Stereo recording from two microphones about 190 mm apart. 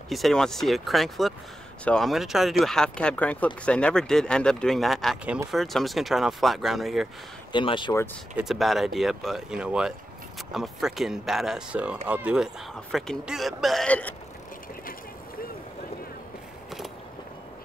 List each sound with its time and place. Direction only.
0.1 s speech: centre (ahead or behind)
7.5 s speech: 25° left (ahead or behind)
8.4 s speech: centre (ahead or behind)